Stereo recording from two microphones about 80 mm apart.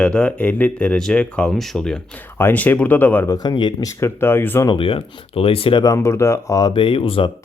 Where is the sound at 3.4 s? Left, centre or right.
Left.